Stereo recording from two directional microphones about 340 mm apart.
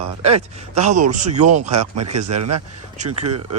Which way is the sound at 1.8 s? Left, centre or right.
Right.